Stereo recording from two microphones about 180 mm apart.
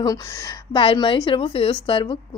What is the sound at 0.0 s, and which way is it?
A woman's voice, 20° left (ahead or behind).